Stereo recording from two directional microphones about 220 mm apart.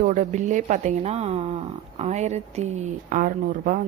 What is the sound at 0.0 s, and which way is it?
Speech, 35° right (ahead or behind).